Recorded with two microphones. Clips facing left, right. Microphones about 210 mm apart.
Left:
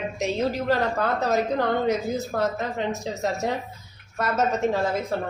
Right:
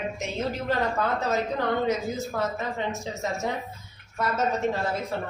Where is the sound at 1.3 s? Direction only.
65° left (ahead or behind).